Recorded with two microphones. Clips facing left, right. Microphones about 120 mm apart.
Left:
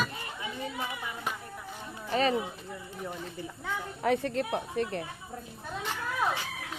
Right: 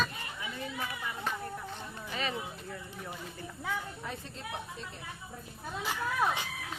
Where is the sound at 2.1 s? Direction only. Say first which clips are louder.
Left 10 dB; 40° left (ahead or behind).